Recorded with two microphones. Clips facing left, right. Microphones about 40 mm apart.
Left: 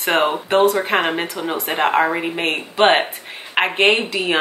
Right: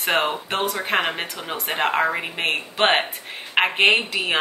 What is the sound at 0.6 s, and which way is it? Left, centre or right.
Speech, left.